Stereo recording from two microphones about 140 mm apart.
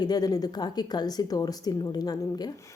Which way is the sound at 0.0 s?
30° left (ahead or behind).